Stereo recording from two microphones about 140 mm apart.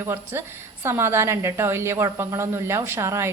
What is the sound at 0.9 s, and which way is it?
A woman's voice, 15° right (ahead or behind).